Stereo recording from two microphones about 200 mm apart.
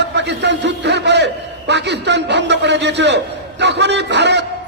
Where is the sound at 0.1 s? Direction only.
60° right (ahead or behind).